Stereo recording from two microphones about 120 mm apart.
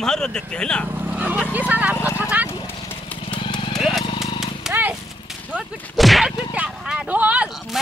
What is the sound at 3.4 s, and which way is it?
Horse, 45° left (ahead or behind).